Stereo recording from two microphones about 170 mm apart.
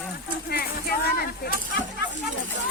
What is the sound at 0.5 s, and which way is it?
Speech, 65° left (ahead or behind).